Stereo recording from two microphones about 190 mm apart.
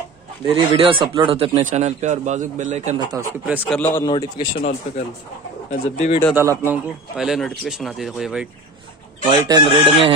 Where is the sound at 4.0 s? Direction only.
25° left (ahead or behind).